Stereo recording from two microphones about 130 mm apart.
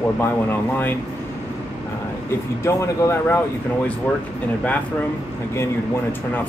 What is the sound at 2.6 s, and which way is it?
Speech, 20° left (ahead or behind).